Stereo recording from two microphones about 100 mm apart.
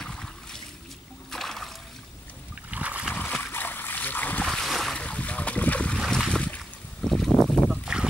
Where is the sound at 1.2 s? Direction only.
5° left (ahead or behind).